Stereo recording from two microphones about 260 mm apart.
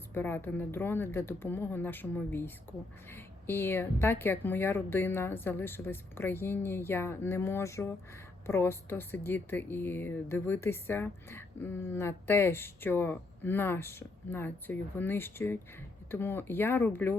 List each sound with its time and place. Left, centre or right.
0.1 s speech: centre